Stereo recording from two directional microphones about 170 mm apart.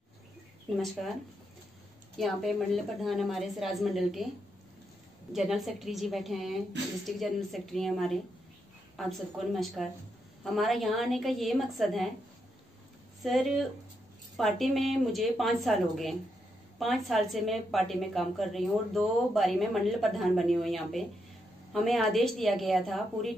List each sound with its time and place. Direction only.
1.0 s a woman's voice: centre (ahead or behind)
2.1 s a woman's voice: centre (ahead or behind)
5.3 s a woman's voice: centre (ahead or behind)
13.2 s a woman's voice: centre (ahead or behind)